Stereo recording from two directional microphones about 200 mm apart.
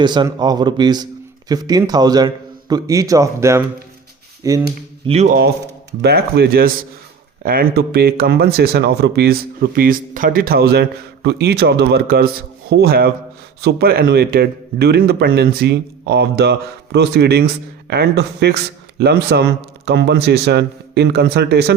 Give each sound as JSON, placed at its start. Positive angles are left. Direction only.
{"t": 0.0, "sound": "a man's voice", "side_deg": -20}
{"t": 5.0, "sound": "speech", "side_deg": -35}
{"t": 6.0, "sound": "speech", "side_deg": -55}